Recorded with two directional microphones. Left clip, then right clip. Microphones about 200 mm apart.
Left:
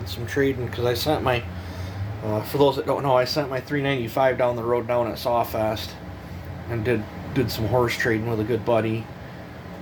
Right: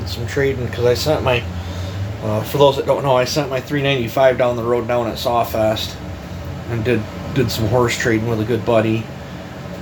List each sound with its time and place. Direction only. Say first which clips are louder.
0.3 s speech: right 4 dB; 60° left (ahead or behind)
2.3 s speech: right 6 dB; 40° left (ahead or behind)
6.9 s speech: right 6 dB; 40° left (ahead or behind)